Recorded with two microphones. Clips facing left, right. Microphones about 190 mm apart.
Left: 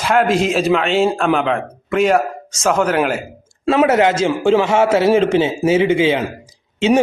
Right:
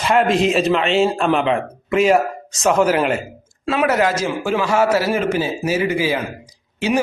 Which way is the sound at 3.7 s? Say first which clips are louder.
Left 4 dB; 25° left (ahead or behind).